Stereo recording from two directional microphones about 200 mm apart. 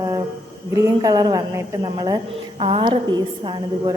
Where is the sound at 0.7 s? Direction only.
15° right (ahead or behind).